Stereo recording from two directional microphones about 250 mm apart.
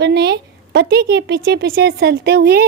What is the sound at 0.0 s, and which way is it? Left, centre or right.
Speech, right.